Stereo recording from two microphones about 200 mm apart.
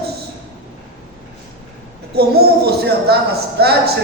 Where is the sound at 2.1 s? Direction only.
50° right (ahead or behind).